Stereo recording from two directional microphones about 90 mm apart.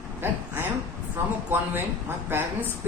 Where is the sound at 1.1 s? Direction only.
25° right (ahead or behind).